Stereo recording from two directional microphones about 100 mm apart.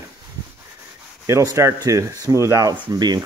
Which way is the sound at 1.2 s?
30° right (ahead or behind).